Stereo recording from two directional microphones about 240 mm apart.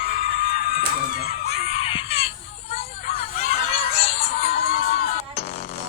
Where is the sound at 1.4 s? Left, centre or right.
Left.